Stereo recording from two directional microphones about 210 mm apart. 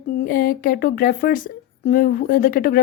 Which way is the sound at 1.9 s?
40° left (ahead or behind).